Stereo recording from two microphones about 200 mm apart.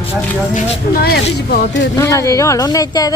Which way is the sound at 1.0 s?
50° left (ahead or behind).